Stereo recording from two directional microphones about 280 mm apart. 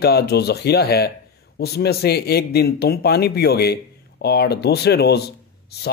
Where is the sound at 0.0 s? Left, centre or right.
Left.